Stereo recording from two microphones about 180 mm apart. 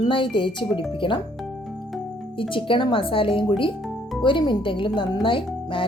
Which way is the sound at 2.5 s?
25° left (ahead or behind).